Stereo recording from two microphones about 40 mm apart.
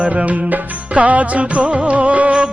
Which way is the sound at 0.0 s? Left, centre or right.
Right.